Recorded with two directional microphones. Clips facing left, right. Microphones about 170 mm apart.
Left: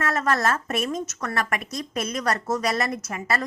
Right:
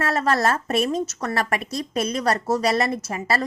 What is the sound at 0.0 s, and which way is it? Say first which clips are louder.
Speech: right 2 dB; 30° right (ahead or behind).